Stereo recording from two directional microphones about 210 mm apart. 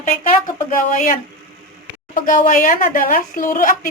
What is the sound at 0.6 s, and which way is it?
Speech, 40° left (ahead or behind).